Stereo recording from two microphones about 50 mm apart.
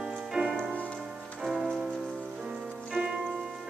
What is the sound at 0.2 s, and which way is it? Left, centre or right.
Music, centre.